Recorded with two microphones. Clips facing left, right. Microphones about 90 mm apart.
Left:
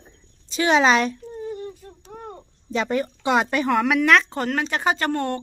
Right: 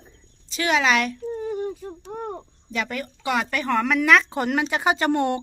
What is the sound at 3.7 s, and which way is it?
Speech, 5° left (ahead or behind).